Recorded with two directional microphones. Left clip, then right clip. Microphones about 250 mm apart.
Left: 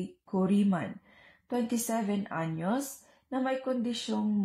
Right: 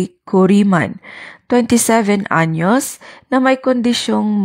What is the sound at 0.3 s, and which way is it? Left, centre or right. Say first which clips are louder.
A woman's voice: right 17 dB; right.